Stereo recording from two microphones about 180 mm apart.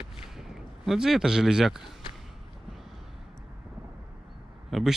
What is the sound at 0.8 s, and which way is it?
Speech, centre (ahead or behind).